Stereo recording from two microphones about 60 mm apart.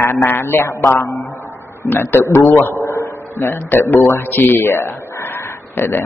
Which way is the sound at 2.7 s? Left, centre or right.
Left.